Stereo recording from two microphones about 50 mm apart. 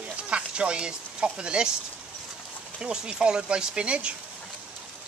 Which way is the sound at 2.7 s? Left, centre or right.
Centre.